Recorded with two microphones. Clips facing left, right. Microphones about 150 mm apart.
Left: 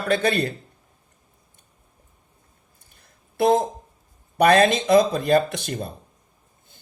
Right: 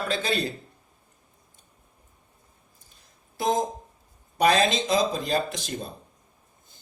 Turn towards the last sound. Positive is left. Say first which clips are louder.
# left 3 dB
turn(degrees=60)  # may be behind; listen again after turning